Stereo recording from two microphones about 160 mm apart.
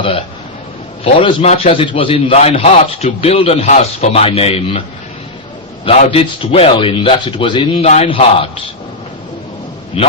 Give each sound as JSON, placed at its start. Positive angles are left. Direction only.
{"t": 1.0, "sound": "a man's voice", "side_deg": 40}
{"t": 6.1, "sound": "a man's voice", "side_deg": 35}
{"t": 10.0, "sound": "a man's voice", "side_deg": 35}